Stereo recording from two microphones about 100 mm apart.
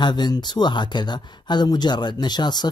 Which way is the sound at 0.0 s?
45° left (ahead or behind).